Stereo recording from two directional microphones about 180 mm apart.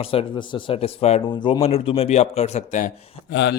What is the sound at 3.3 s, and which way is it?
Speech, 80° left.